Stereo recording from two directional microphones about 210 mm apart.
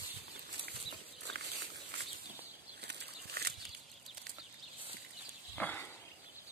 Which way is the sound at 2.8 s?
50° right (ahead or behind).